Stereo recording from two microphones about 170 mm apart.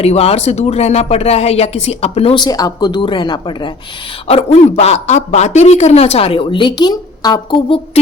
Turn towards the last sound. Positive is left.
turn(degrees=25)  # may be behind; listen again after turning